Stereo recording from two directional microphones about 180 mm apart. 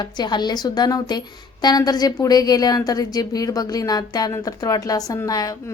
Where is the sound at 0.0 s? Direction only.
25° left (ahead or behind).